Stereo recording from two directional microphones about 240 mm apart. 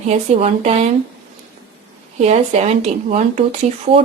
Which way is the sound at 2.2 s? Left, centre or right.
Right.